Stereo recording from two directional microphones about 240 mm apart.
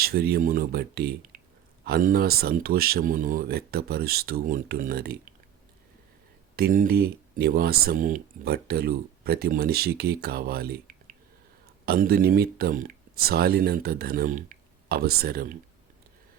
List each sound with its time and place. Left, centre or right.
0.0 s speech: right
6.6 s speech: right